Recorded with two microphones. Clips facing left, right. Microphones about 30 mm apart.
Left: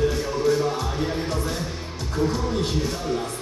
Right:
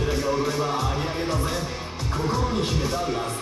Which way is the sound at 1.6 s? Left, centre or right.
Centre.